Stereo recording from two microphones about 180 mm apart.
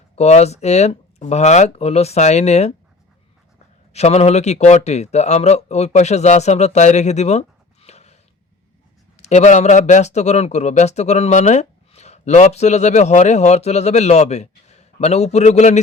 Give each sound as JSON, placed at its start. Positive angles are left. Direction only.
{"t": 0.2, "sound": "speech", "side_deg": 35}
{"t": 3.9, "sound": "speech", "side_deg": 35}